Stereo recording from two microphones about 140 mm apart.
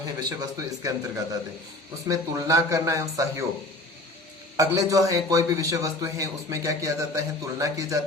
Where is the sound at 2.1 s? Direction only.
25° right (ahead or behind).